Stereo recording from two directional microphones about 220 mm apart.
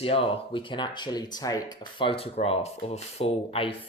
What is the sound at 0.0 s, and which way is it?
Speech, 25° left (ahead or behind).